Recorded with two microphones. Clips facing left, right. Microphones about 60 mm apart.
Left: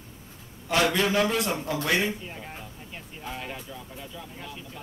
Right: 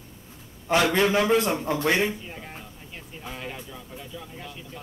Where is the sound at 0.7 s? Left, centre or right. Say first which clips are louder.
Right 3 dB; right.